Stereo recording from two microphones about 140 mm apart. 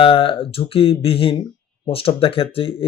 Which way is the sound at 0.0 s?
40° left (ahead or behind).